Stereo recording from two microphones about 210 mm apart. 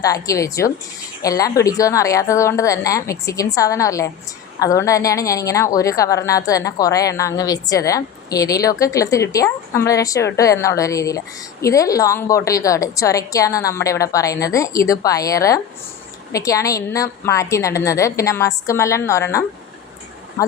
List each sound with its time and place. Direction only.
0.0 s a woman's voice: 15° left (ahead or behind)